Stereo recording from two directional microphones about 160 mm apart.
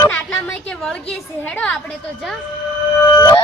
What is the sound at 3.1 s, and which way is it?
Music, 25° left (ahead or behind).